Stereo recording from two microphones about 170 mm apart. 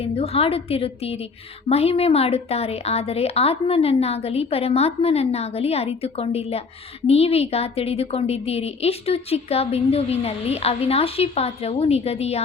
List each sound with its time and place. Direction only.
0.0 s a woman's voice: 35° left (ahead or behind)